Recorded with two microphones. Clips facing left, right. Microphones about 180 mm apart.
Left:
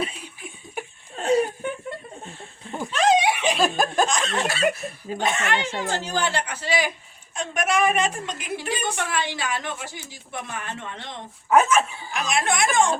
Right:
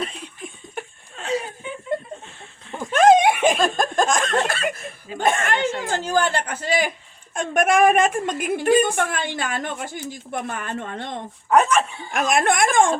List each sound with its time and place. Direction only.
0.8 s laughter: 10° left (ahead or behind)
1.6 s chuckle: 50° left (ahead or behind)
2.9 s a sound: 50° right (ahead or behind)
3.6 s a sound: 5° left (ahead or behind)
4.0 s a woman's voice: 50° right (ahead or behind)
11.4 s speech: centre (ahead or behind)
12.1 s a woman's voice: 50° right (ahead or behind)